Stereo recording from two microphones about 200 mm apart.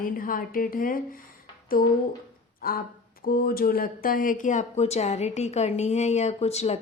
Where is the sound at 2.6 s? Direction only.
45° left (ahead or behind).